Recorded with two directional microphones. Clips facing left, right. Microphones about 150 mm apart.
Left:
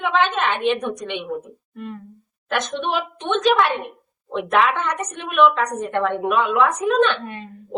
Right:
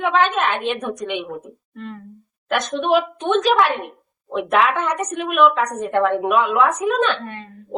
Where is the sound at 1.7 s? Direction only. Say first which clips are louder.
Left 1 dB; 15° left (ahead or behind).